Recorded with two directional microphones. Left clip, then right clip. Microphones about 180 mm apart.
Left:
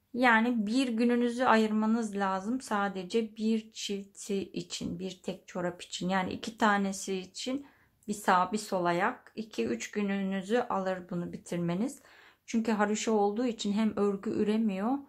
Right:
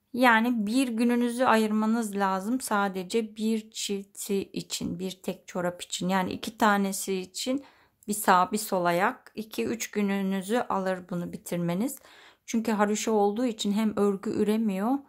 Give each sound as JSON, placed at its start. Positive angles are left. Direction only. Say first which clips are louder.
{"t": 0.1, "sound": "speech", "louder": "right 3 dB", "side_deg": -35}